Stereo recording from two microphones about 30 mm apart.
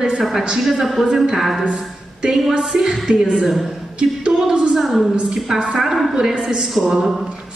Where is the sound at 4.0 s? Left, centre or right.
Right.